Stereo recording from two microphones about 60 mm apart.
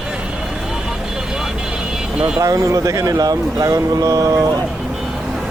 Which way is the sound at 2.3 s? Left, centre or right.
Right.